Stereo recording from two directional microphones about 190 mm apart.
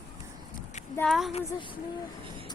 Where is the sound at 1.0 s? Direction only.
Centre (ahead or behind).